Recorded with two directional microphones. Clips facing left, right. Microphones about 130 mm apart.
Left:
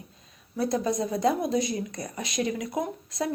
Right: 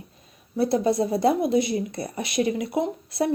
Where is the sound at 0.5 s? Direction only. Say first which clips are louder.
Right 5 dB; 30° right (ahead or behind).